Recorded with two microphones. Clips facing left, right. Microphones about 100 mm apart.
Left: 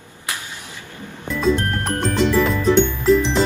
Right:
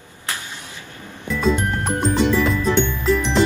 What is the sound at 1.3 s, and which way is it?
Music, centre (ahead or behind).